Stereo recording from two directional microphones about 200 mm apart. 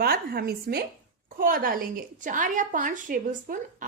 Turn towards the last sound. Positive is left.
turn(degrees=-45)  # may be behind; listen again after turning